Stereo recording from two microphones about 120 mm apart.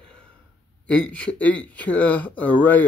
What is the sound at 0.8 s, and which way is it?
Speech, 10° left (ahead or behind).